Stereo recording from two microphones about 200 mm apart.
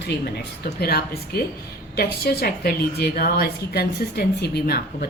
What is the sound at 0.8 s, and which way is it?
A woman's voice, 50° left (ahead or behind).